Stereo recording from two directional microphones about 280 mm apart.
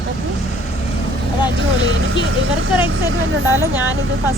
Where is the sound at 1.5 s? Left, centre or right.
Right.